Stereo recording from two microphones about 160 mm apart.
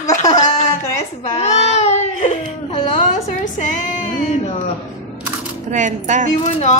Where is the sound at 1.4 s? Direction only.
45° left (ahead or behind).